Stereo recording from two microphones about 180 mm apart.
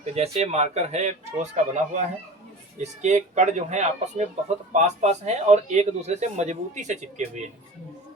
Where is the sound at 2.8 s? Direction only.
40° right (ahead or behind).